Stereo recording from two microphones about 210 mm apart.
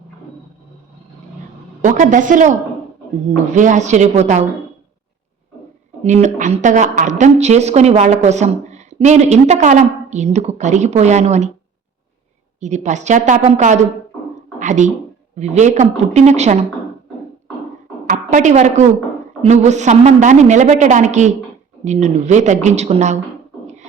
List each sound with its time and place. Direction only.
1.8 s a woman's voice: 35° right (ahead or behind)
6.0 s a woman's voice: 30° right (ahead or behind)
12.5 s a woman's voice: 35° right (ahead or behind)
18.0 s a woman's voice: 40° right (ahead or behind)